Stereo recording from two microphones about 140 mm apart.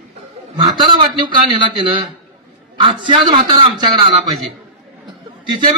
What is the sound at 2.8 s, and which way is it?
A man's voice, 35° right (ahead or behind).